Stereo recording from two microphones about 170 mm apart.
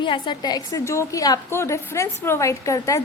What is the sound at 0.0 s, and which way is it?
A woman's voice, 30° left (ahead or behind).